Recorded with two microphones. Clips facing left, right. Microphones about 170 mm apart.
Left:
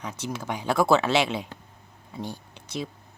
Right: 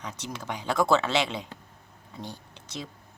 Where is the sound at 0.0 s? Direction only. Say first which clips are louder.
Left 4 dB; 10° left (ahead or behind).